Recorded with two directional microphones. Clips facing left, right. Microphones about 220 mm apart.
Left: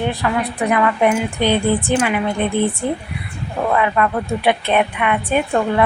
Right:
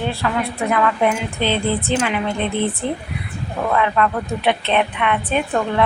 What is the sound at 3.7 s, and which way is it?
A woman's voice, 10° left (ahead or behind).